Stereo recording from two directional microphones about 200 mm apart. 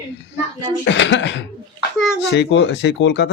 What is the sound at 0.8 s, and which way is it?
Speech, 65° left (ahead or behind).